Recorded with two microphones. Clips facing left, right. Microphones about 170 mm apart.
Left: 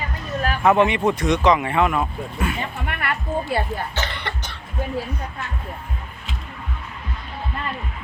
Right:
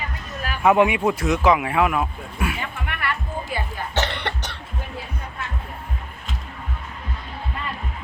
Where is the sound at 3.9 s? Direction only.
75° right (ahead or behind).